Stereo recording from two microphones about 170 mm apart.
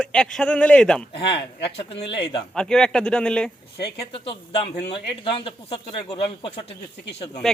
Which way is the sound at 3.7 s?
75° left (ahead or behind).